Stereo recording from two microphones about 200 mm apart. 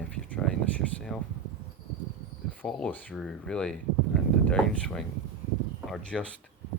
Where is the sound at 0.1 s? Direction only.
5° left (ahead or behind).